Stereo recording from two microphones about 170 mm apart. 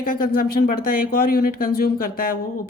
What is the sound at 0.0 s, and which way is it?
Speech, 60° left (ahead or behind).